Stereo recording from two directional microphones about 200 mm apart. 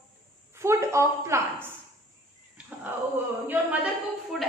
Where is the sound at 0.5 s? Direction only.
15° right (ahead or behind).